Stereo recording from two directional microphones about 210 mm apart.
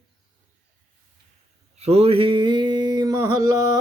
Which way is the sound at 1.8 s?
30° right (ahead or behind).